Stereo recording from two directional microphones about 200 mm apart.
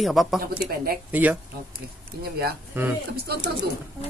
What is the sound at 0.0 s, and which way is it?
Speech, centre (ahead or behind).